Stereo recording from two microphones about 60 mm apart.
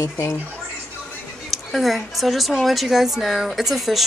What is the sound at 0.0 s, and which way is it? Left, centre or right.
Speech, left.